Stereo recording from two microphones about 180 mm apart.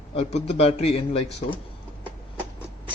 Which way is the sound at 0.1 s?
35° left (ahead or behind).